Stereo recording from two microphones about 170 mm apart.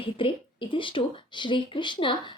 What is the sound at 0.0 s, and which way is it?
Speech, 30° left (ahead or behind).